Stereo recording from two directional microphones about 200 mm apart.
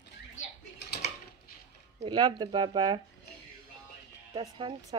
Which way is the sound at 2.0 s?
20° right (ahead or behind).